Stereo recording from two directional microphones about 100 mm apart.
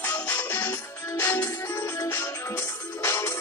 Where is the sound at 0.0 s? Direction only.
15° left (ahead or behind).